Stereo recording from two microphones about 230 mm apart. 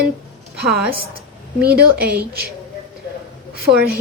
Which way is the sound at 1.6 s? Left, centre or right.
Right.